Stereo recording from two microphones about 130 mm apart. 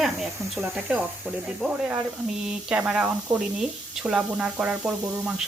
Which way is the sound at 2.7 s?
10° right (ahead or behind).